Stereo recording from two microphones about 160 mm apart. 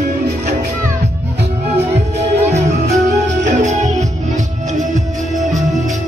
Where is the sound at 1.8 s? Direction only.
40° right (ahead or behind).